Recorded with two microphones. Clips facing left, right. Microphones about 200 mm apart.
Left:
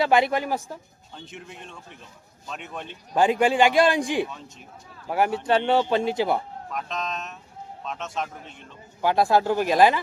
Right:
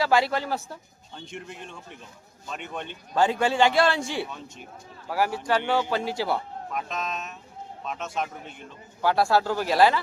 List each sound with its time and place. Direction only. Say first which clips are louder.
0.0 s a man's voice: left 2 dB; 20° left (ahead or behind)
1.1 s speech: right 2 dB; centre (ahead or behind)
3.2 s a man's voice: left 2 dB; 15° left (ahead or behind)
6.7 s speech: even; 5° right (ahead or behind)
9.0 s a man's voice: left 2 dB; 20° left (ahead or behind)